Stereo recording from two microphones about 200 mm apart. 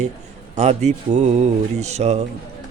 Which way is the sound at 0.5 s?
35° right (ahead or behind).